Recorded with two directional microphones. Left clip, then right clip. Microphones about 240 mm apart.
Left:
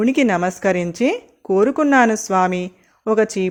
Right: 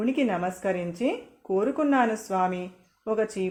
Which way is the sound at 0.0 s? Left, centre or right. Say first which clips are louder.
Left 9 dB; left.